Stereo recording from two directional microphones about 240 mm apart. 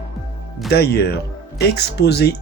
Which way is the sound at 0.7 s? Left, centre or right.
Left.